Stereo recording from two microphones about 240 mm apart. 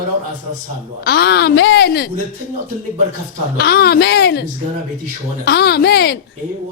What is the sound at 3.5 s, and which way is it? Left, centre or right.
A woman's voice, left.